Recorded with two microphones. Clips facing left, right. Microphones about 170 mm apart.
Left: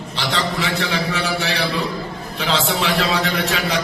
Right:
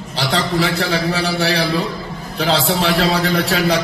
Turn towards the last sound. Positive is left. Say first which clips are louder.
# right 5 dB
turn(degrees=-35)  # may be behind; listen again after turning